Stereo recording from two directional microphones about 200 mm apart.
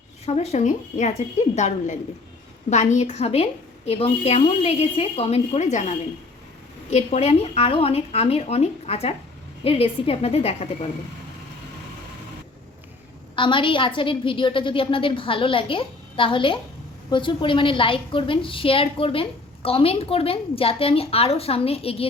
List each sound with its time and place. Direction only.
0.3 s a woman's voice: 35° left (ahead or behind)
13.3 s a woman's voice: 25° left (ahead or behind)